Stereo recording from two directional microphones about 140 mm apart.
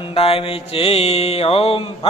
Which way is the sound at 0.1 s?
45° left (ahead or behind).